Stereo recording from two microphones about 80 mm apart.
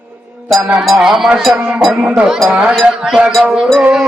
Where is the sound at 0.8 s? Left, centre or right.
Centre.